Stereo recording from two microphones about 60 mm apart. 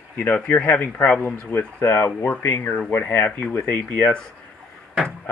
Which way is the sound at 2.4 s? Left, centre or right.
Left.